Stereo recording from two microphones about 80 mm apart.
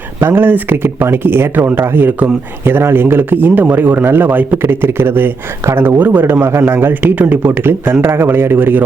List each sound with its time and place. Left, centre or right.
0.2 s speech: right